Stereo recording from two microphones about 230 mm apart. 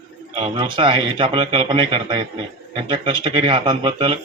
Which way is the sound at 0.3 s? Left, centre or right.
Right.